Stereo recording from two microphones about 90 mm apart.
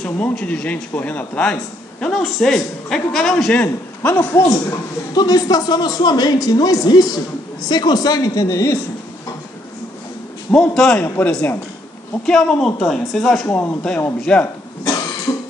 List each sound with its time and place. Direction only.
0.0 s speech: 15° left (ahead or behind)
3.5 s a man's voice: 20° left (ahead or behind)
4.5 s a man's voice: 40° left (ahead or behind)
10.5 s speech: 5° left (ahead or behind)
12.3 s speech: 5° left (ahead or behind)
13.5 s speech: 15° left (ahead or behind)